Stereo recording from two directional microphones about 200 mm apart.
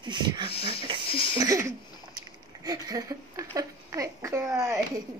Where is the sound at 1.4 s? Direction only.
15° right (ahead or behind).